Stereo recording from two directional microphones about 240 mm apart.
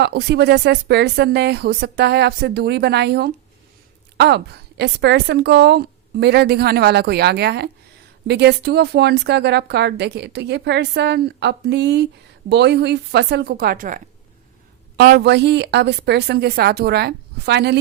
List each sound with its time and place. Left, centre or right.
0.0 s a woman's voice: right